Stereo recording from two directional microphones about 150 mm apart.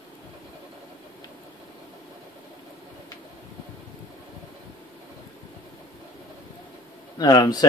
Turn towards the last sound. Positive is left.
turn(degrees=25)  # may be behind; listen again after turning